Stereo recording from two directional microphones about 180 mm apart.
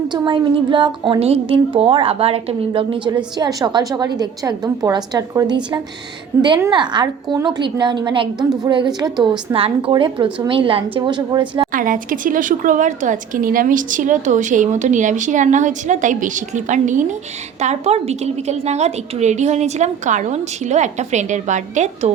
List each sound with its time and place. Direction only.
0.1 s a woman's voice: 25° right (ahead or behind)
6.7 s a woman's voice: 25° right (ahead or behind)
11.7 s a woman's voice: 50° right (ahead or behind)